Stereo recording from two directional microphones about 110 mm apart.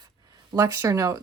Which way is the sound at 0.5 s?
25° right (ahead or behind).